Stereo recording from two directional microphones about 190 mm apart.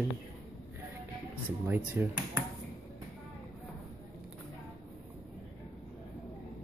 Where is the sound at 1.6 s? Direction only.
10° right (ahead or behind).